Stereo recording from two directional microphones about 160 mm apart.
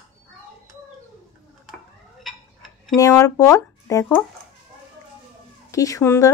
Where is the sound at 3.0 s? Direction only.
20° left (ahead or behind).